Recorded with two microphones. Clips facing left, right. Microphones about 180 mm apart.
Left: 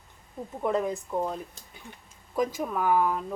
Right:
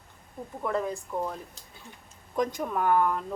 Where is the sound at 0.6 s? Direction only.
20° left (ahead or behind).